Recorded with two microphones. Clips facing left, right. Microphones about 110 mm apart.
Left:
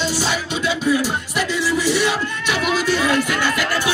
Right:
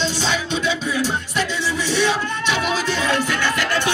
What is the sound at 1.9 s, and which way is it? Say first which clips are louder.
Speech: left 1 dB; 10° left (ahead or behind).